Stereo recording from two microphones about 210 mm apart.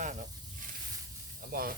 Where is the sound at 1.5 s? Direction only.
45° right (ahead or behind).